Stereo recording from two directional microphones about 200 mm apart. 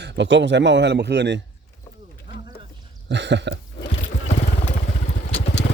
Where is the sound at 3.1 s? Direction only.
60° right (ahead or behind).